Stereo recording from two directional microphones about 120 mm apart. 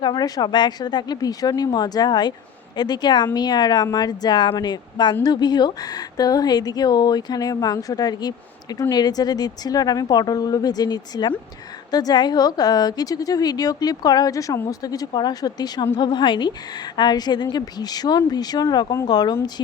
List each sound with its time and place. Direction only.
0.0 s a woman's voice: 35° left (ahead or behind)